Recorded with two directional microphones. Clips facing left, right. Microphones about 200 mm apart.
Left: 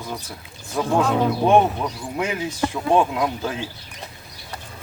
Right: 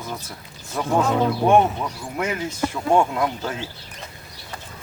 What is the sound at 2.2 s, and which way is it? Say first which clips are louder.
Speech: even; 15° left (ahead or behind).